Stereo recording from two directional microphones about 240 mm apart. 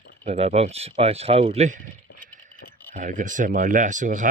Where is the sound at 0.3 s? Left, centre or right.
Right.